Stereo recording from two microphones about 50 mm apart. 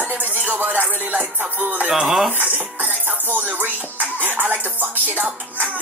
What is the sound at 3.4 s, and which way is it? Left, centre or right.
Speech, right.